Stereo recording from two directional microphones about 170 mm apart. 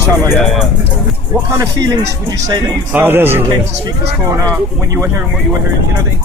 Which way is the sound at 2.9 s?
10° right (ahead or behind).